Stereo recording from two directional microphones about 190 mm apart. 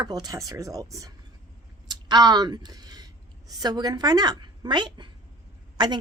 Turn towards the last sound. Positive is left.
turn(degrees=-20)  # may be behind; listen again after turning